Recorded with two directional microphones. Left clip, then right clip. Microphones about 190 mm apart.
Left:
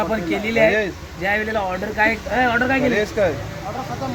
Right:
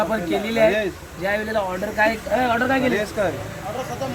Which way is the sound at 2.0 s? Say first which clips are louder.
Left 1 dB; 15° left (ahead or behind).